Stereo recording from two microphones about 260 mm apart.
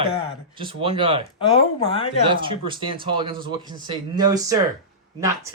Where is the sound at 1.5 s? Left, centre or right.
Left.